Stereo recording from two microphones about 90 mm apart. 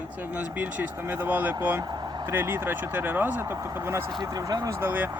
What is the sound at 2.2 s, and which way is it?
Speech, 25° right (ahead or behind).